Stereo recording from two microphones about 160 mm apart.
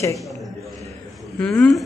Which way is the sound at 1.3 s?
5° left (ahead or behind).